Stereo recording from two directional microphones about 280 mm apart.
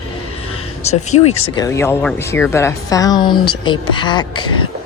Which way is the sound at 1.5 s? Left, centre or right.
Centre.